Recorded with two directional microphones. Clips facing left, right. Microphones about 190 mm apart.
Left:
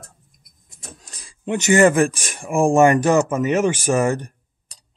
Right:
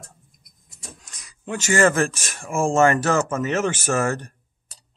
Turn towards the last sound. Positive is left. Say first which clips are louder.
# left 4 dB
turn(degrees=15)  # may be behind; listen again after turning